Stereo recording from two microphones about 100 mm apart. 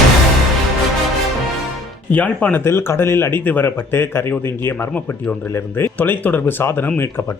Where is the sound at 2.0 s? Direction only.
15° left (ahead or behind).